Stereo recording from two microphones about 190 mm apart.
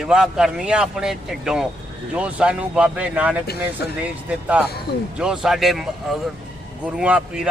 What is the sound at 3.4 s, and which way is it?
Speech, 60° left (ahead or behind).